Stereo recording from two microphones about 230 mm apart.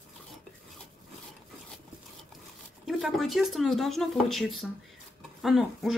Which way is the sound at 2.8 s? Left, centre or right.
Centre.